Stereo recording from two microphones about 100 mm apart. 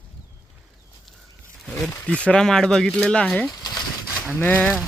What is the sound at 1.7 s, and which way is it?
Speech, 5° left (ahead or behind).